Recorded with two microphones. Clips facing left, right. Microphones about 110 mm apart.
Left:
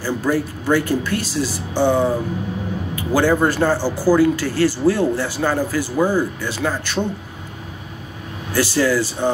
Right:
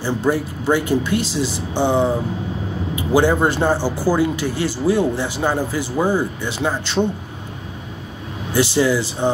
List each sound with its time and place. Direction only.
0.0 s a man's voice: 20° right (ahead or behind)
8.5 s a man's voice: 20° right (ahead or behind)